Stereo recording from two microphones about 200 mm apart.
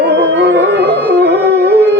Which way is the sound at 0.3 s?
55° right (ahead or behind).